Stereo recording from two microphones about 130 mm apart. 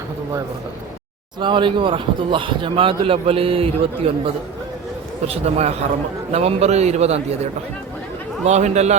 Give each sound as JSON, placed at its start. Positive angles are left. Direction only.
{"t": 1.4, "sound": "speech", "side_deg": -40}
{"t": 5.2, "sound": "a man's voice", "side_deg": -55}
{"t": 8.4, "sound": "a man's voice", "side_deg": -60}